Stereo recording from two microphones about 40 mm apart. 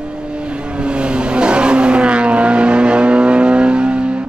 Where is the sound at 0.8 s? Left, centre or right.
Right.